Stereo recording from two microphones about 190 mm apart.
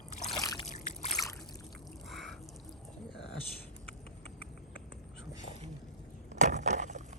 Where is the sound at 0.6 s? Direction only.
40° left (ahead or behind).